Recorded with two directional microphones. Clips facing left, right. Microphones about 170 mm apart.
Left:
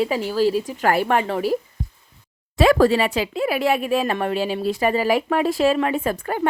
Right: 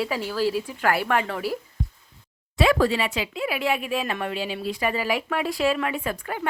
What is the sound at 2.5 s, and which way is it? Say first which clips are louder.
Speech: left 5 dB; 45° left (ahead or behind).